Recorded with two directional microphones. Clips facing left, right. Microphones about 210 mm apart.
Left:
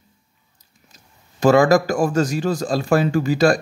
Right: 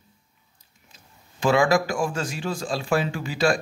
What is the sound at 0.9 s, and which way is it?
Speech, 40° left (ahead or behind).